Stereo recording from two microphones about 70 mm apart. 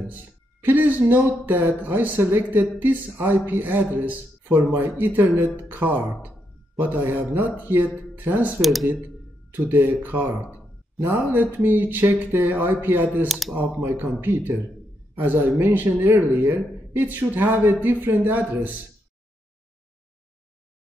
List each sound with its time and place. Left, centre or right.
0.0 s speech: right
8.5 s speech: centre
9.5 s speech: right
13.3 s speech: centre
13.6 s speech: right